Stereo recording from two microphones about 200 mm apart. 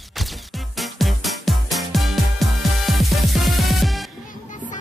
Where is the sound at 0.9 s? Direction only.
Centre (ahead or behind).